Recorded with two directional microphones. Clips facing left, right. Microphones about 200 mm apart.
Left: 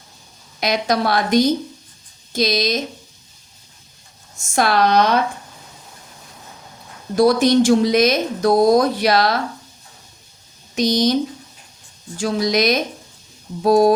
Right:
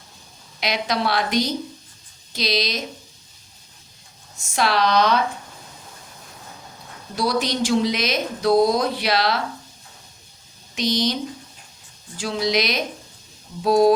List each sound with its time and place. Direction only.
0.6 s speech: 45° left (ahead or behind)
4.5 s speech: 50° left (ahead or behind)
7.2 s speech: 50° left (ahead or behind)
10.8 s speech: 45° left (ahead or behind)